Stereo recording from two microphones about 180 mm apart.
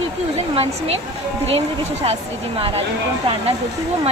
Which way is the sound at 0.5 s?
35° right (ahead or behind).